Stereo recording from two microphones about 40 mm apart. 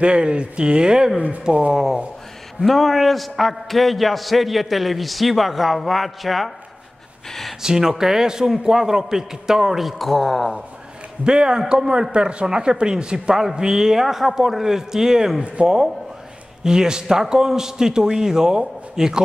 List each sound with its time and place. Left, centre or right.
0.0 s speech: right
1.7 s a man's voice: centre
2.6 s a man's voice: centre
7.2 s a sound: centre
7.6 s a man's voice: centre
11.2 s a man's voice: centre
15.4 s speech: right
16.6 s a man's voice: centre